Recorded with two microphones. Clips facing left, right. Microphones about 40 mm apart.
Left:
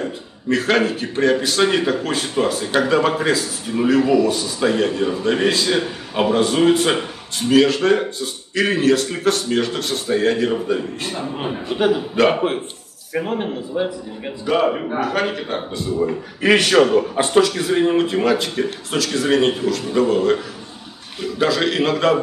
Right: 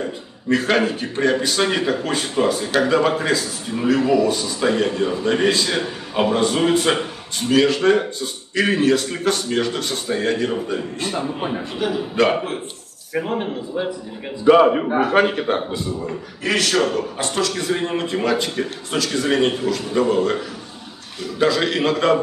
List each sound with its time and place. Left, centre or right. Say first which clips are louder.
0.0 s a man's voice: left 1 dB; centre
12.2 s a man's voice: left 1 dB; centre
14.4 s a man's voice: right 6 dB; right
16.4 s a man's voice: left 5 dB; left; by 22.2 s centre